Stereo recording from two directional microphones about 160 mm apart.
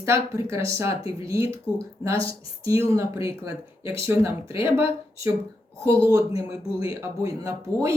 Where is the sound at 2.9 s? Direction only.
20° right (ahead or behind).